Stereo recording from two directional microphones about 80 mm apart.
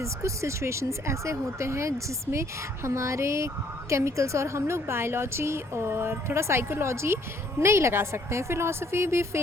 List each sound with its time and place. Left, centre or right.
0.0 s speech: right